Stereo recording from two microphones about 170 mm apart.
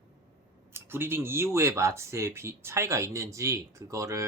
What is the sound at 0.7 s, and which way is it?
Speech, 15° right (ahead or behind).